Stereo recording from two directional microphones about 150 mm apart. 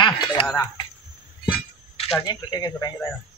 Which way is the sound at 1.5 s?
40° left (ahead or behind).